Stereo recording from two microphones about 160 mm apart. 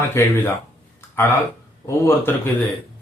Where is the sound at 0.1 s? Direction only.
15° left (ahead or behind).